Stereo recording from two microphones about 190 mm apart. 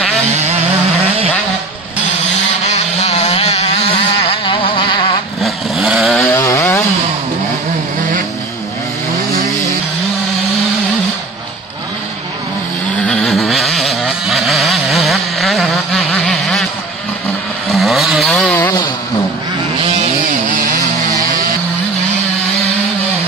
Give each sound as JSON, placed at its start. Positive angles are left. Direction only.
{"t": 0.3, "sound": "vehicle", "side_deg": -35}
{"t": 2.6, "sound": "vehicle", "side_deg": 35}
{"t": 5.4, "sound": "chainsaw", "side_deg": 0}
{"t": 13.0, "sound": "a sound", "side_deg": 5}
{"t": 17.6, "sound": "vehicle", "side_deg": 0}
{"t": 18.4, "sound": "a sound", "side_deg": 10}